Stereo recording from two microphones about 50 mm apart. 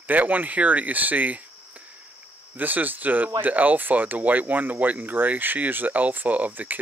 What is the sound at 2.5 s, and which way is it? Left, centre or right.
Speech, right.